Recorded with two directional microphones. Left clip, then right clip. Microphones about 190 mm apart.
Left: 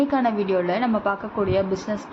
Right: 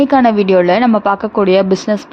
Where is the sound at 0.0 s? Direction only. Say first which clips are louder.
Right 11 dB; 55° right (ahead or behind).